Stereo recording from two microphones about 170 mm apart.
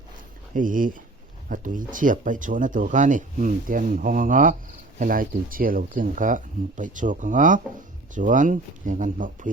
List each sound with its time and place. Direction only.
0.5 s speech: 50° right (ahead or behind)